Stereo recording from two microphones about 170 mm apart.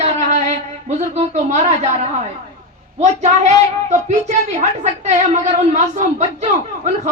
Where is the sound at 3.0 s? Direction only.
45° right (ahead or behind).